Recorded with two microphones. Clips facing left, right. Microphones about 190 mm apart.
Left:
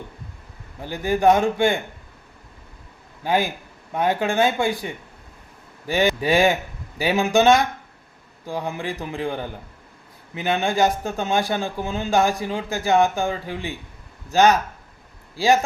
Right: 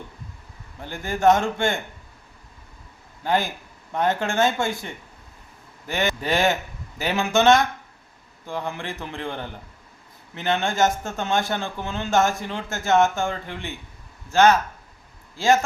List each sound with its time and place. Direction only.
0.8 s speech: 15° left (ahead or behind)
3.2 s speech: 10° left (ahead or behind)